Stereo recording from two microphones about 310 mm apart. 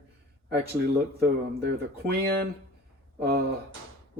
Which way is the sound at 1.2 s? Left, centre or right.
Right.